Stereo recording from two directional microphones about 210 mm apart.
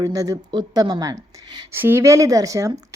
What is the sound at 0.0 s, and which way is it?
Speech, 15° right (ahead or behind).